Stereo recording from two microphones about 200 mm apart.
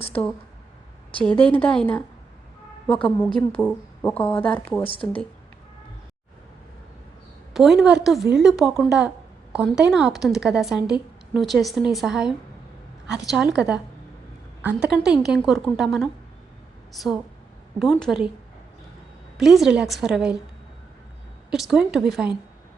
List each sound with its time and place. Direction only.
0.1 s a woman's voice: 5° left (ahead or behind)
4.8 s speech: 25° left (ahead or behind)
7.5 s a woman's voice: centre (ahead or behind)
19.4 s a woman's voice: centre (ahead or behind)
21.5 s a woman's voice: centre (ahead or behind)